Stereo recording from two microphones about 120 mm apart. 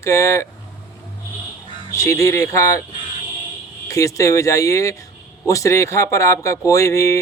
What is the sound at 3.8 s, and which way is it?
Speech, 25° left (ahead or behind).